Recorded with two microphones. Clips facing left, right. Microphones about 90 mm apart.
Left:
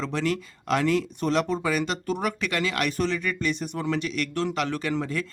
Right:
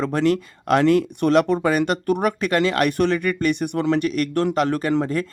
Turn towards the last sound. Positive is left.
turn(degrees=-50)  # may be behind; listen again after turning